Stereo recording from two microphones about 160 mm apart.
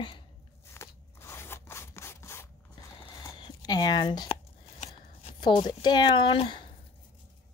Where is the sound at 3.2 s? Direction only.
25° left (ahead or behind).